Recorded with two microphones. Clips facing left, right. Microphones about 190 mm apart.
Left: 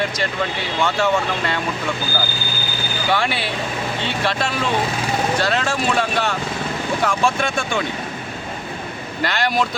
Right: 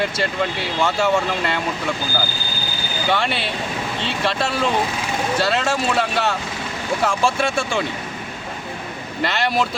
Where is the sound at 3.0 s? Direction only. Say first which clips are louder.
Even; centre (ahead or behind).